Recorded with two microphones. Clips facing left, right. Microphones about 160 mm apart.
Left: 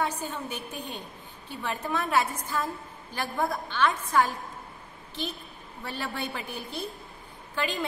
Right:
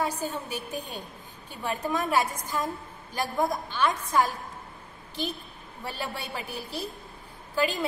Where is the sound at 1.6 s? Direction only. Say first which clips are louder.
Right 2 dB; 15° right (ahead or behind).